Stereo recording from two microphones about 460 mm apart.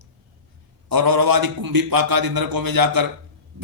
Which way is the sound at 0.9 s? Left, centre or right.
Right.